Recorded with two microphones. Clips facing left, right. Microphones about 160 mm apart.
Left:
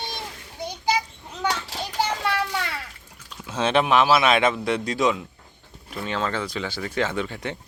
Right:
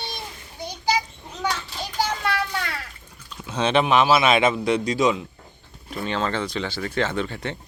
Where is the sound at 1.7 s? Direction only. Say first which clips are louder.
Left 1 dB; 90° left.